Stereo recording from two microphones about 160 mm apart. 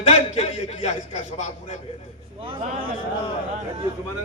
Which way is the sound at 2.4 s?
35° right (ahead or behind).